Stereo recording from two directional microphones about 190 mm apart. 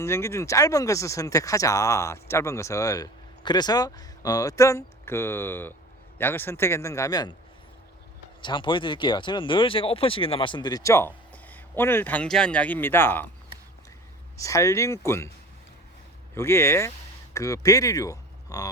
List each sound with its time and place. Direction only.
0.0 s speech: 15° left (ahead or behind)
8.4 s speech: 25° left (ahead or behind)
14.3 s speech: 15° left (ahead or behind)
16.3 s speech: 15° left (ahead or behind)